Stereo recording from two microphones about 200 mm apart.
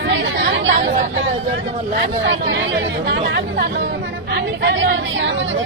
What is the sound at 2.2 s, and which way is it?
A woman's voice, 65° right (ahead or behind).